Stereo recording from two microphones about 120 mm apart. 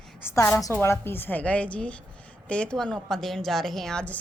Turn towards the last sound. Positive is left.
turn(degrees=5)  # may be behind; listen again after turning